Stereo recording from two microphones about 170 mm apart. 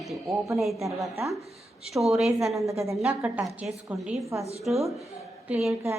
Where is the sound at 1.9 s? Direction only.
Centre (ahead or behind).